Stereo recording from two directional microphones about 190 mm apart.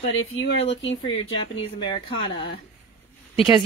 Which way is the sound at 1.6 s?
25° left (ahead or behind).